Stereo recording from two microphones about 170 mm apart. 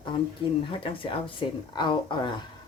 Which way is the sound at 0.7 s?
30° left (ahead or behind).